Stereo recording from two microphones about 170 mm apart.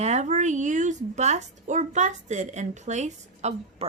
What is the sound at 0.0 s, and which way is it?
A woman's voice, 40° right (ahead or behind).